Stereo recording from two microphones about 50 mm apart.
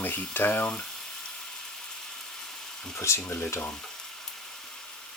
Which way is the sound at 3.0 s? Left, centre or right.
Left.